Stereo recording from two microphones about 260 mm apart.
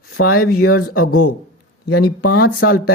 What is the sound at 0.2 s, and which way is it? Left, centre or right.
Speech, left.